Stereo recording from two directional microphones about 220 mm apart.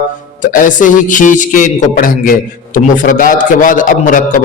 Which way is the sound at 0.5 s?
35° left (ahead or behind).